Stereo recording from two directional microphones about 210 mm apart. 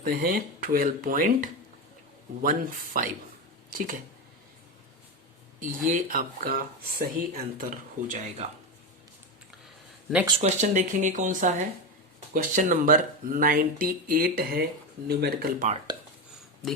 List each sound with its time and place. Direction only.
0.0 s speech: 45° right (ahead or behind)
5.5 s speech: 40° right (ahead or behind)
10.2 s speech: 30° right (ahead or behind); by 15.7 s 45° right (ahead or behind)